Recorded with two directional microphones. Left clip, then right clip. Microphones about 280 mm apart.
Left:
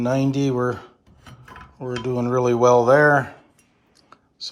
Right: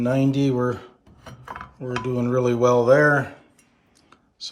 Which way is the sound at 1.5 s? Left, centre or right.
Centre.